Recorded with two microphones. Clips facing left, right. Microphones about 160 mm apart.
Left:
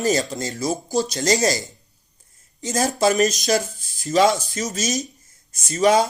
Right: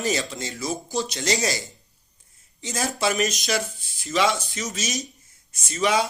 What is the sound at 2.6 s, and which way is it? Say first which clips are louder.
Speech: left 6 dB; 40° left (ahead or behind).